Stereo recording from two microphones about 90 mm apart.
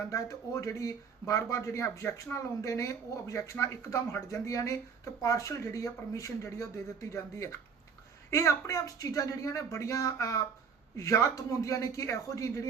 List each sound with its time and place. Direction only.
0.0 s speech: 35° left (ahead or behind)